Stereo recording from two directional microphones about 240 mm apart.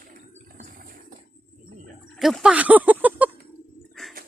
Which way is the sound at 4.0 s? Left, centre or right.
Centre.